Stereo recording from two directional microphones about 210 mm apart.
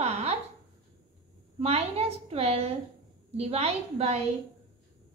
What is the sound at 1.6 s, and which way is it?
A woman's voice, 30° right (ahead or behind).